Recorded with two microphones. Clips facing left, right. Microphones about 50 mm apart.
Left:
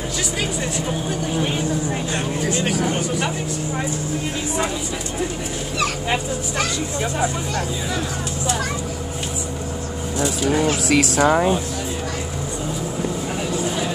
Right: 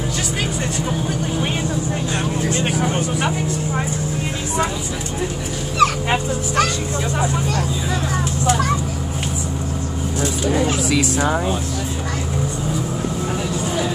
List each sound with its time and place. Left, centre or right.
5.8 s dog: right
11.2 s speech: left